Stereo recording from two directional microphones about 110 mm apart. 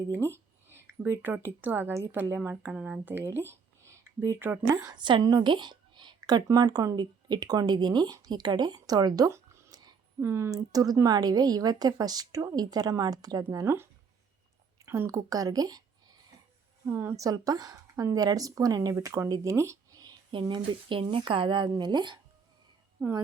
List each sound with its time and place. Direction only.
0.1 s speech: 25° right (ahead or behind)
2.7 s speech: 10° right (ahead or behind)
4.7 s speech: 35° right (ahead or behind)
9.3 s a sound: 35° right (ahead or behind)
10.2 s speech: 20° right (ahead or behind)
14.8 s speech: 25° right (ahead or behind)
16.8 s speech: 20° right (ahead or behind)
17.2 s speech: 35° right (ahead or behind)